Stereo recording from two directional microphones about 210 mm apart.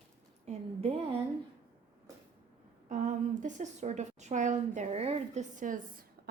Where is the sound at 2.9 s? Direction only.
35° right (ahead or behind).